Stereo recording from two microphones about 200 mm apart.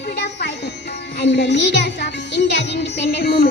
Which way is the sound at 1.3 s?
60° left (ahead or behind).